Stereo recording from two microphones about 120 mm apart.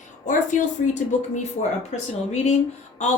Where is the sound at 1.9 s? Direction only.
65° left (ahead or behind).